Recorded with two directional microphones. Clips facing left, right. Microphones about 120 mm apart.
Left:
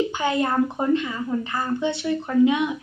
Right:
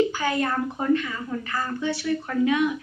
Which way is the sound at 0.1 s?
25° left (ahead or behind).